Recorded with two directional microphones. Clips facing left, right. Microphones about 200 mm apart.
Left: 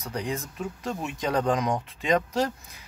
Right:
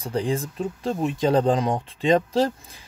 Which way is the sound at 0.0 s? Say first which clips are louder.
Right 6 dB; 30° right (ahead or behind).